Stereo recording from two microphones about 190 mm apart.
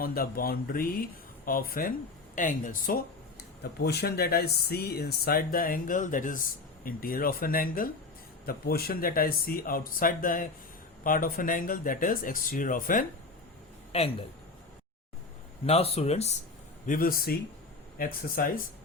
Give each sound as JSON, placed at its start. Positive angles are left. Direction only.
{"t": 0.0, "sound": "speech", "side_deg": 50}
{"t": 13.9, "sound": "speech", "side_deg": 30}
{"t": 15.6, "sound": "speech", "side_deg": 30}
{"t": 16.8, "sound": "speech", "side_deg": 45}